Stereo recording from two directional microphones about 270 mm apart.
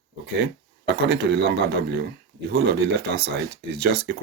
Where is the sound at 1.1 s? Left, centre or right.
Right.